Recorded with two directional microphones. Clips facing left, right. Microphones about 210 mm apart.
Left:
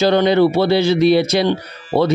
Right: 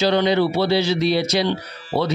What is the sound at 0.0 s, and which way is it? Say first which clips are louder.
Speech: left 5 dB; 50° left (ahead or behind).